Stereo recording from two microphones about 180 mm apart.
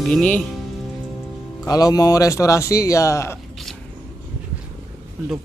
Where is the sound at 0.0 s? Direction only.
5° left (ahead or behind).